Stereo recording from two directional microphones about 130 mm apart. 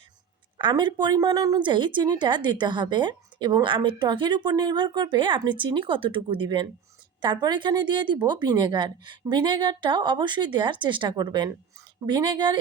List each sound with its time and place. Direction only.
0.6 s a woman's voice: 35° right (ahead or behind)